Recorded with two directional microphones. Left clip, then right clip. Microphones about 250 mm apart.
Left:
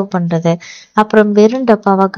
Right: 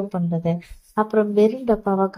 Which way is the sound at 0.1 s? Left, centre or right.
Left.